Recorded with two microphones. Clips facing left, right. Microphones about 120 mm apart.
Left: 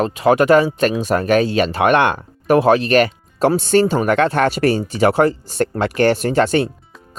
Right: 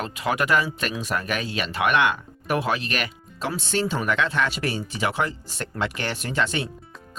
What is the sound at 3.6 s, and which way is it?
Speech, 50° left (ahead or behind).